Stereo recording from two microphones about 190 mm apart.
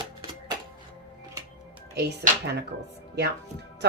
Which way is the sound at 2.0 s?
60° right (ahead or behind).